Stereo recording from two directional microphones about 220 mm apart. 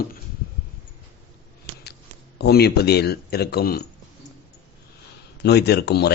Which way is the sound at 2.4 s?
45° left (ahead or behind).